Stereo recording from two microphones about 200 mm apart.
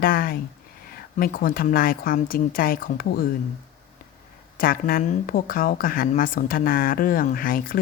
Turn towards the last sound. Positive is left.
turn(degrees=45)  # may be behind; listen again after turning